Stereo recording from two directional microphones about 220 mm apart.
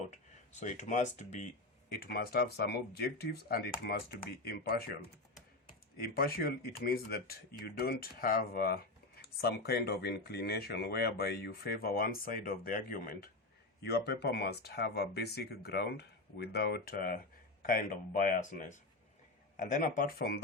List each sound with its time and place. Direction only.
0.6 s speech: 35° left (ahead or behind)
1.9 s speech: 45° left (ahead or behind)
6.0 s speech: 45° left (ahead or behind)